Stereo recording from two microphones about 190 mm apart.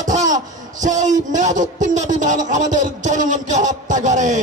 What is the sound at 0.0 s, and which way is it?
Speech, 40° right (ahead or behind).